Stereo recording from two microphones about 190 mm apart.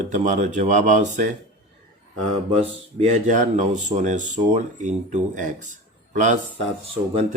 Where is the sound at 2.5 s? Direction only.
30° right (ahead or behind).